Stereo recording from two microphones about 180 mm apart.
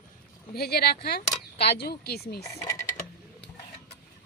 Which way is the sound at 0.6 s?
60° left (ahead or behind).